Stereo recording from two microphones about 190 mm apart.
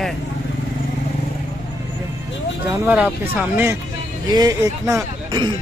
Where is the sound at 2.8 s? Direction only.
5° right (ahead or behind).